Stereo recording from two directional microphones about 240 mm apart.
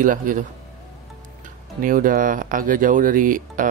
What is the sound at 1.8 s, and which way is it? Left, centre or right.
Speech, right.